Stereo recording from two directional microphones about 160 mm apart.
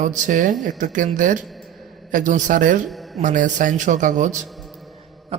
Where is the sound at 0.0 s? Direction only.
55° right (ahead or behind).